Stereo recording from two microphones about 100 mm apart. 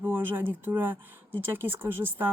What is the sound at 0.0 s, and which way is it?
Speech, 25° right (ahead or behind).